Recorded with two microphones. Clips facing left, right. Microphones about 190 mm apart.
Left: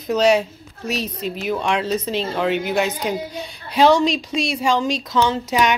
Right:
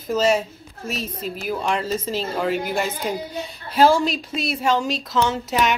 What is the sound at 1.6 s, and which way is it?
Speech, 5° right (ahead or behind).